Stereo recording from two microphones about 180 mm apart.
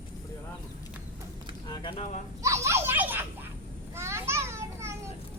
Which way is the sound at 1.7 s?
30° left (ahead or behind).